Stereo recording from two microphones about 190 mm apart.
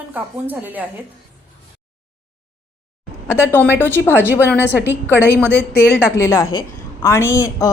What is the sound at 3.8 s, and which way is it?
Speech, 10° left (ahead or behind).